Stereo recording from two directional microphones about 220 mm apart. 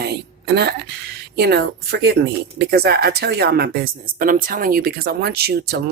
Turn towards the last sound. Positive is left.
turn(degrees=-45)  # may be behind; listen again after turning